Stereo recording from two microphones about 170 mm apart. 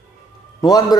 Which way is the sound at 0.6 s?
20° left (ahead or behind).